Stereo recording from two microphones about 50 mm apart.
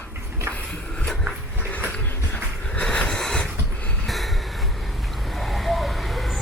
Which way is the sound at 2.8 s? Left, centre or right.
Centre.